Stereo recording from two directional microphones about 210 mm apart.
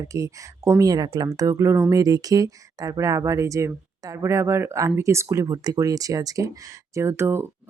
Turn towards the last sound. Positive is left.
turn(degrees=-10)  # may be behind; listen again after turning